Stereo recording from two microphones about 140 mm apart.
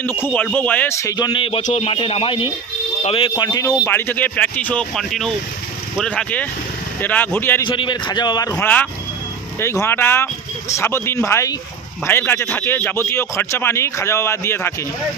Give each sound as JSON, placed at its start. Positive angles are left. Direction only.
{"t": 0.0, "sound": "a man's voice", "side_deg": 15}
{"t": 7.6, "sound": "a man's voice", "side_deg": 35}
{"t": 8.5, "sound": "a man's voice", "side_deg": 10}